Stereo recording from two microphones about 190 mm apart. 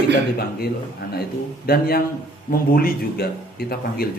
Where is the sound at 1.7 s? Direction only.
55° left (ahead or behind).